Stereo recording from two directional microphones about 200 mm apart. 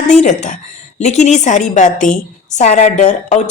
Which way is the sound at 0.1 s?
35° left (ahead or behind).